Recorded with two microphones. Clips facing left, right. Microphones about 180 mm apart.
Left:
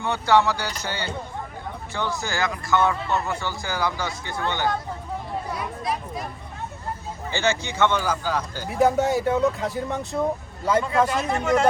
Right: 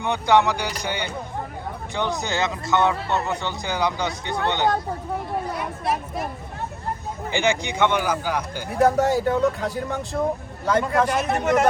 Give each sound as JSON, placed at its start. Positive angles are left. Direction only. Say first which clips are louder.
{"t": 0.0, "sound": "speech", "louder": "right 1 dB", "side_deg": -15}
{"t": 7.3, "sound": "speech", "louder": "right 2 dB", "side_deg": -15}
{"t": 8.8, "sound": "speech", "louder": "right 1 dB", "side_deg": 0}